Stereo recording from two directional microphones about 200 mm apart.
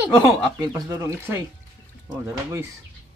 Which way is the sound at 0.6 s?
15° right (ahead or behind).